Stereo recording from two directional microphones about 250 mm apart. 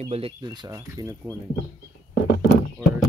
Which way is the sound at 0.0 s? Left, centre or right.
Right.